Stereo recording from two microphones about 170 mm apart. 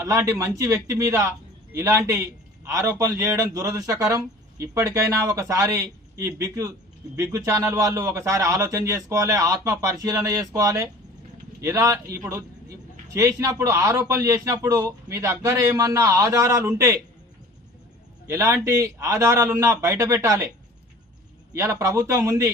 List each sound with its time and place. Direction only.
0.0 s a man's voice: 20° right (ahead or behind)
18.3 s a man's voice: 20° right (ahead or behind)
21.5 s a man's voice: 15° right (ahead or behind)